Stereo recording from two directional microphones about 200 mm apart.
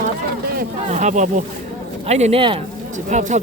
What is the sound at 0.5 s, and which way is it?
A man's voice, 35° right (ahead or behind).